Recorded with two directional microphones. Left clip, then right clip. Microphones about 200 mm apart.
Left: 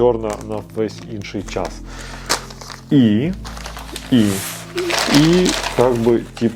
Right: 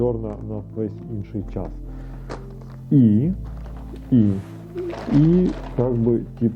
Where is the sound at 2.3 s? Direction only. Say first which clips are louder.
Left 15 dB; 5° left (ahead or behind).